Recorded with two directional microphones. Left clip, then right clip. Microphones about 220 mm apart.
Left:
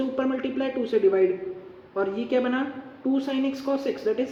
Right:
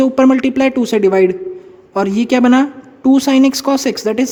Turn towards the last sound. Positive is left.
turn(degrees=-50)  # may be behind; listen again after turning